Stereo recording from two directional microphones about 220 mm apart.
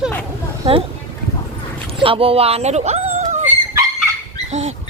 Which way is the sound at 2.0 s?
25° right (ahead or behind).